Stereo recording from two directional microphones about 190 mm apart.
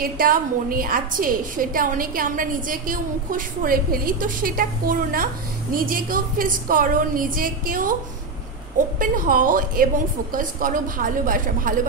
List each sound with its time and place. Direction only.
0.0 s a woman's voice: 50° right (ahead or behind)